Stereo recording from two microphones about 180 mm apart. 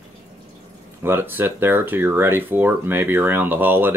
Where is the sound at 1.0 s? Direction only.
10° right (ahead or behind).